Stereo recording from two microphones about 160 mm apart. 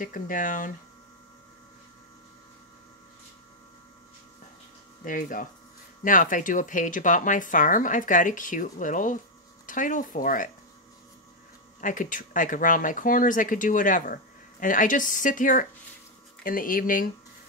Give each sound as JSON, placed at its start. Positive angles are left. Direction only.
{"t": 0.0, "sound": "speech", "side_deg": 55}
{"t": 5.0, "sound": "speech", "side_deg": 55}
{"t": 11.8, "sound": "speech", "side_deg": 55}